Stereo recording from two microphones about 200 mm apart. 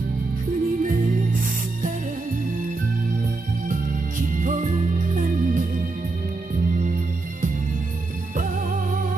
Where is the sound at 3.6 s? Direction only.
40° right (ahead or behind).